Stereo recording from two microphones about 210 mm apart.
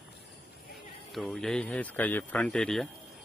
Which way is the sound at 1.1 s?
Centre (ahead or behind).